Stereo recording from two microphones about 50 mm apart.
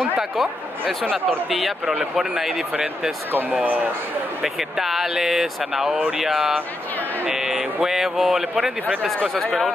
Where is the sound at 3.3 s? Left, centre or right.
Right.